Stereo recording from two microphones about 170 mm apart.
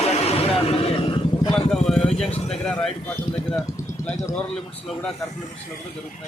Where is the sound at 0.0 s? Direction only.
35° left (ahead or behind).